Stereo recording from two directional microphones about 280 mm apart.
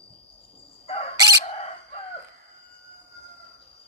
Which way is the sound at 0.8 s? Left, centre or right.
Left.